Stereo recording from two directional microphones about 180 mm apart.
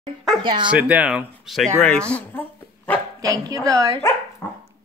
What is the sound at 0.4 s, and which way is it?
Speech, 25° right (ahead or behind).